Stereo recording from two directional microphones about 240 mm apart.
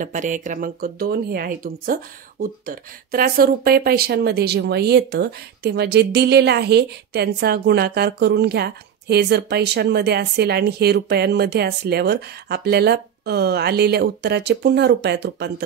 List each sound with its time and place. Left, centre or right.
0.0 s speech: right